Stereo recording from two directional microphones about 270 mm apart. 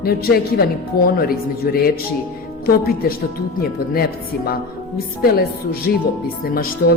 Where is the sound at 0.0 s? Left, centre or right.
Left.